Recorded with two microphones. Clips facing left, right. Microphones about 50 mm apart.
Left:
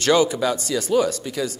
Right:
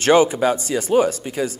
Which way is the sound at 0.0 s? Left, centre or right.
Right.